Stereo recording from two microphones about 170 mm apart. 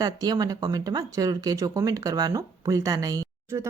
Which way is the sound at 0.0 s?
20° right (ahead or behind).